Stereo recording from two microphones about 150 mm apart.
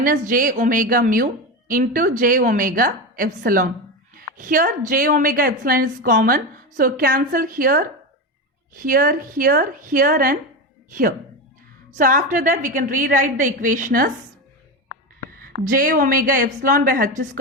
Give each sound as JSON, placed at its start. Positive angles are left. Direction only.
{"t": 0.0, "sound": "a woman's voice", "side_deg": -70}
{"t": 11.9, "sound": "a woman's voice", "side_deg": -65}
{"t": 15.4, "sound": "a woman's voice", "side_deg": -70}